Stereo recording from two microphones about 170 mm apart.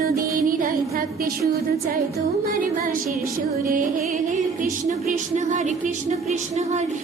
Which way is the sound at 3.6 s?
50° right (ahead or behind).